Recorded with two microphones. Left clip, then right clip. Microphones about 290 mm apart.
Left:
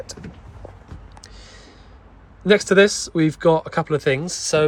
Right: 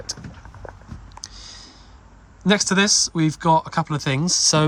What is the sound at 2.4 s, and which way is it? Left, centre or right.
Speech, centre.